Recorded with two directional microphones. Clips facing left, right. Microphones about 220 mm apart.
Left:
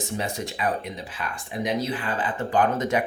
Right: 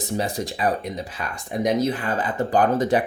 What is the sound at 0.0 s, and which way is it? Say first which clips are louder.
Speech: right 4 dB; 35° right (ahead or behind).